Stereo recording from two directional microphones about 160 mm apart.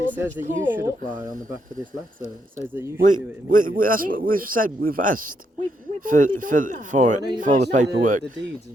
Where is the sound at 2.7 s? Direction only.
15° right (ahead or behind).